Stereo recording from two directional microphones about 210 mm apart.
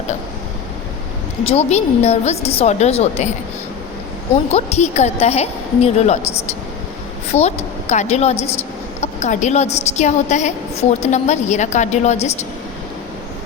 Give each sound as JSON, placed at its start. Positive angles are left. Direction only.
{"t": 1.5, "sound": "a woman's voice", "side_deg": 30}
{"t": 4.5, "sound": "a woman's voice", "side_deg": 30}